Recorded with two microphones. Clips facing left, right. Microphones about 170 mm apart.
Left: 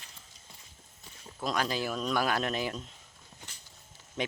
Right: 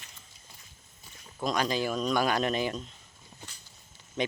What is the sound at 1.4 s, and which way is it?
Speech, 5° left (ahead or behind).